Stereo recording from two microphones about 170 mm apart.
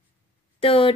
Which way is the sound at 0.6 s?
35° left (ahead or behind).